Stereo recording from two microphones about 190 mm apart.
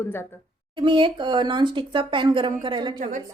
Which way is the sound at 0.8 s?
25° right (ahead or behind).